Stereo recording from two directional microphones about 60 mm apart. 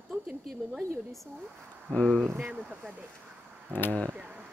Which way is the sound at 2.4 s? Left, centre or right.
Right.